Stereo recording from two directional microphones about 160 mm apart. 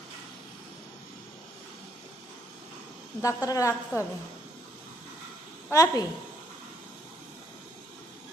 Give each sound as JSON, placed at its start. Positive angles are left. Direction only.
{"t": 3.2, "sound": "a woman's voice", "side_deg": 20}
{"t": 5.7, "sound": "a woman's voice", "side_deg": 20}